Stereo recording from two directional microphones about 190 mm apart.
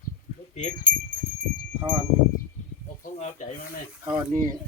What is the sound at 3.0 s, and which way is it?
Speech, 45° left (ahead or behind).